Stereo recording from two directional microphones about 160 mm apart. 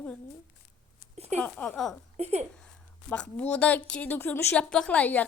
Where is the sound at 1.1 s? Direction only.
40° right (ahead or behind).